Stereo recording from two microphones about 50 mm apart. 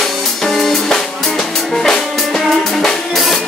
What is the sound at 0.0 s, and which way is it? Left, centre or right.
Music, centre.